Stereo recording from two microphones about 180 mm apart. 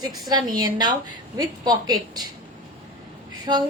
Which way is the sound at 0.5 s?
25° right (ahead or behind).